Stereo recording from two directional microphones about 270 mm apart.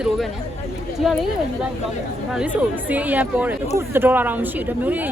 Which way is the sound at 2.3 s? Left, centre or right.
Centre.